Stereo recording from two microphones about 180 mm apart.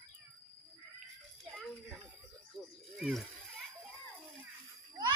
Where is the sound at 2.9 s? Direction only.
Centre (ahead or behind).